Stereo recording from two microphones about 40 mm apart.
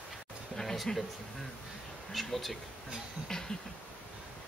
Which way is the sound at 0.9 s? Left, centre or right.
Centre.